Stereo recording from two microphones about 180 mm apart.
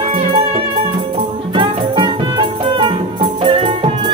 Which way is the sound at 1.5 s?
25° right (ahead or behind).